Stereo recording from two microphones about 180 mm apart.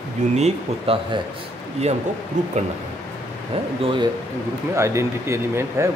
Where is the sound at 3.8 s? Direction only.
30° right (ahead or behind).